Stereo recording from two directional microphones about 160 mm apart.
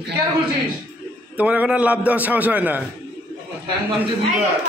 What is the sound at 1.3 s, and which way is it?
A man's voice, 10° right (ahead or behind).